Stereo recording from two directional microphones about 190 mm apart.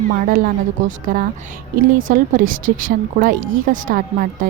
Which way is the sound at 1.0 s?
45° right (ahead or behind).